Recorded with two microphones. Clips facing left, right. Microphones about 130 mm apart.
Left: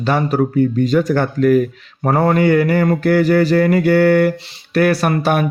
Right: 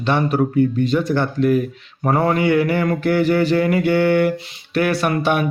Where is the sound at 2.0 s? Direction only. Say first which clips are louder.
Left 3 dB; 40° left (ahead or behind).